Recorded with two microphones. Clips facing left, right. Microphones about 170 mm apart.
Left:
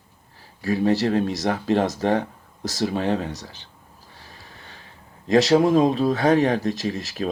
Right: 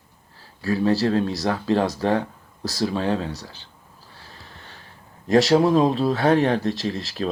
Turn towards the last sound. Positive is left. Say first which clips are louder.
# even
turn(degrees=20)  # may be behind; listen again after turning